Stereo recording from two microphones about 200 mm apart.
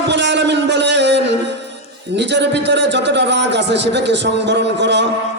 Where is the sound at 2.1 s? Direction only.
60° right (ahead or behind).